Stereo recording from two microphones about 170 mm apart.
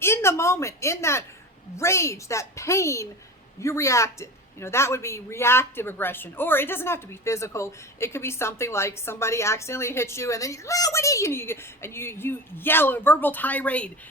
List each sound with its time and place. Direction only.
0.0 s a woman's voice: 15° left (ahead or behind)